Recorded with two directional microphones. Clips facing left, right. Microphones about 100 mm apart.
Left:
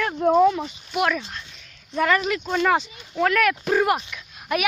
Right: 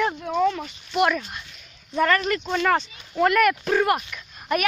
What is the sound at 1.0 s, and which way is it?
Speech, 5° right (ahead or behind).